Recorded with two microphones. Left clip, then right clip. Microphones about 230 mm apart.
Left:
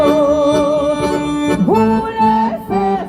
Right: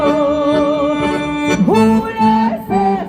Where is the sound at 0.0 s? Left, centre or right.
Left.